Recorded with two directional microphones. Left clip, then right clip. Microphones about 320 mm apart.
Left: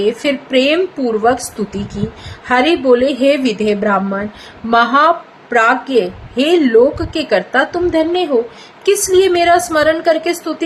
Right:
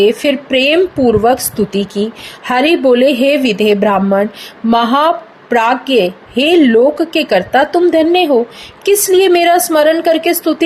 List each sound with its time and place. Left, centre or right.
0.0 s a woman's voice: centre